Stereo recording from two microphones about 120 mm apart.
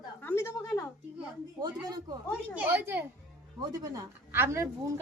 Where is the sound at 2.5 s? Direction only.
15° right (ahead or behind).